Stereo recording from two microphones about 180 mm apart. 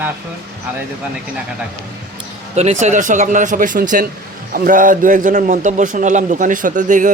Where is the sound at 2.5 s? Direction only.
40° right (ahead or behind).